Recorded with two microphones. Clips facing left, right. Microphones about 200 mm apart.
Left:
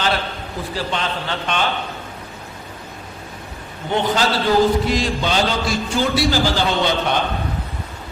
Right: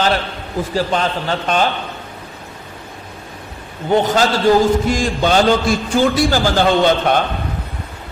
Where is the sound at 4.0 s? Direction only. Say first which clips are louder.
Right 3 dB; 45° right (ahead or behind).